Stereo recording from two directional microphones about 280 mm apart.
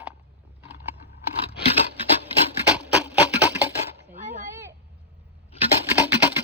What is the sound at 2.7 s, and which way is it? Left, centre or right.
Music, centre.